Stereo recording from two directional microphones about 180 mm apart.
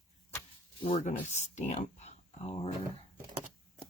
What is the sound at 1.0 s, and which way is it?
Speech, 40° left (ahead or behind).